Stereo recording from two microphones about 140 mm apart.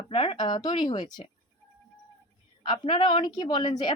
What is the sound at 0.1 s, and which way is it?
Speech, 40° left (ahead or behind).